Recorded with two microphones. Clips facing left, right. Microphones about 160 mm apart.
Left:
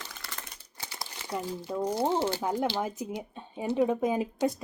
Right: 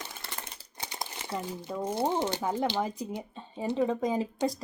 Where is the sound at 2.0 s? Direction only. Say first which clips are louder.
Even; 15° right (ahead or behind).